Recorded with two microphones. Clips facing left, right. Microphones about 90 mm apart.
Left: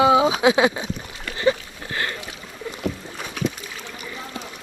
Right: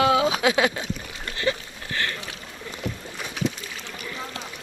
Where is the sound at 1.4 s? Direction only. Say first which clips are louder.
Left 6 dB; 20° left (ahead or behind).